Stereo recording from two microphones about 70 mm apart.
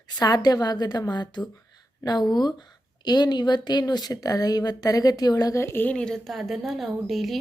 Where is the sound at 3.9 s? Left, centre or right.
Left.